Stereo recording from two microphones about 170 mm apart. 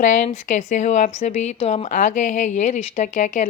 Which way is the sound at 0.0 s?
50° left (ahead or behind).